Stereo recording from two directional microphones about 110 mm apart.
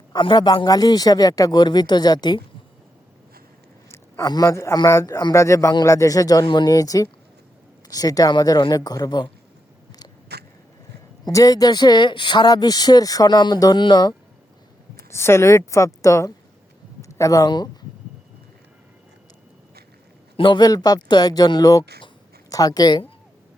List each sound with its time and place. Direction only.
0.1 s speech: 45° left (ahead or behind)
3.8 s a sound: 25° left (ahead or behind)
4.3 s speech: 30° left (ahead or behind)
11.3 s speech: 30° left (ahead or behind)
14.9 s speech: 25° left (ahead or behind)
20.3 s speech: 45° left (ahead or behind)